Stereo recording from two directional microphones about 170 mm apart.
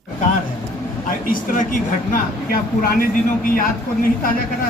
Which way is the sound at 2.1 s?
60° left (ahead or behind).